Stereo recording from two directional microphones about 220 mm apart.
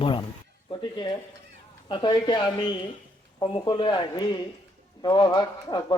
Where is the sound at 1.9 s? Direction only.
20° left (ahead or behind).